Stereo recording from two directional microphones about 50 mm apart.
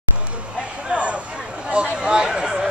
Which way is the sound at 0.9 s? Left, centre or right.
Right.